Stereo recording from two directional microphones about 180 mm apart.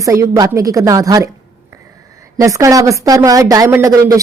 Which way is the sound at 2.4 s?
20° right (ahead or behind).